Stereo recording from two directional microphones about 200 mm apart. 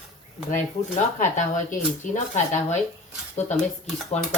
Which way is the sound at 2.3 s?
35° left (ahead or behind).